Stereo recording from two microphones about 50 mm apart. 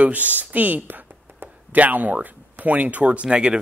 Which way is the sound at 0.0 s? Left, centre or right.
Right.